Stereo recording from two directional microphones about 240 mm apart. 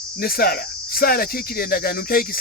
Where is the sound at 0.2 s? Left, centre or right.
Left.